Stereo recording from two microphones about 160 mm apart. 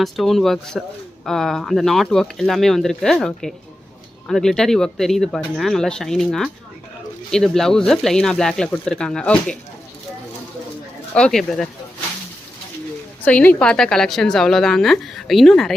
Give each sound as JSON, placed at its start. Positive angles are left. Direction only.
{"t": 0.0, "sound": "speech", "side_deg": 0}
{"t": 11.1, "sound": "speech", "side_deg": 5}
{"t": 13.2, "sound": "speech", "side_deg": 10}